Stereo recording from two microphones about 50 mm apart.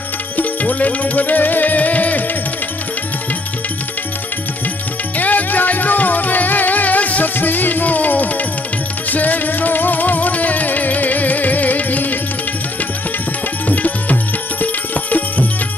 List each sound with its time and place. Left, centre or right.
0.4 s music: left
5.1 s music: left
13.7 s music: left